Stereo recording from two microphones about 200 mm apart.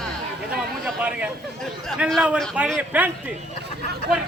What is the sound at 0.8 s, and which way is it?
Speech, 5° right (ahead or behind).